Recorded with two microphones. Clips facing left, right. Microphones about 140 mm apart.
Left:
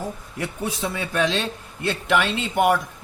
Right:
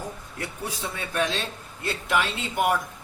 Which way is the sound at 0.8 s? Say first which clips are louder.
Left 4 dB; 90° left.